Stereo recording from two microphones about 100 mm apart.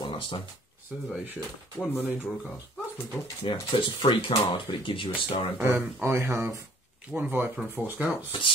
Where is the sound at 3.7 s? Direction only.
60° left (ahead or behind).